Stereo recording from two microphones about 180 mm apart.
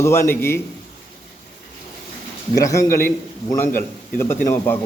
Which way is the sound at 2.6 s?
15° left (ahead or behind).